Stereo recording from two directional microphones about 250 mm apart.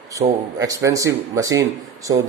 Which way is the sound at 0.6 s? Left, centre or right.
Centre.